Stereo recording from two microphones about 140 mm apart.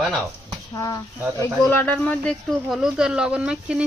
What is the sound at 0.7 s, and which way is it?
Speech, 25° left (ahead or behind).